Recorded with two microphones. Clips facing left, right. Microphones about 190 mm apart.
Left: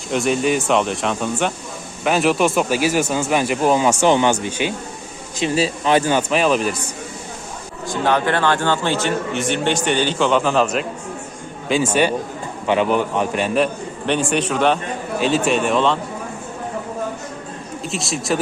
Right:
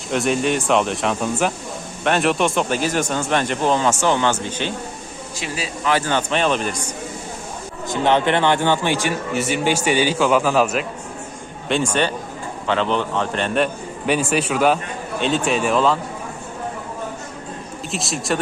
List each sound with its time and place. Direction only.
0.1 s speech: centre (ahead or behind)
5.4 s speech: 25° left (ahead or behind)
6.1 s speech: 10° left (ahead or behind)
7.9 s a man's voice: 20° right (ahead or behind); by 10.8 s 5° right (ahead or behind)
11.7 s speech: 5° left (ahead or behind)
14.1 s speech: 5° right (ahead or behind)
17.9 s speech: centre (ahead or behind)